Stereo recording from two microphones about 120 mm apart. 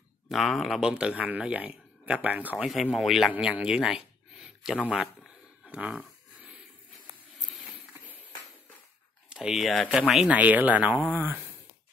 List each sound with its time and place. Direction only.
0.3 s speech: centre (ahead or behind)
3.3 s a sound: 10° right (ahead or behind)
9.3 s speech: 5° right (ahead or behind)